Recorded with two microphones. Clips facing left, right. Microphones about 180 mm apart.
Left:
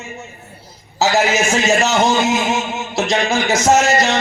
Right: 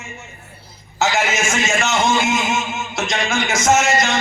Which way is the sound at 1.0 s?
35° left (ahead or behind).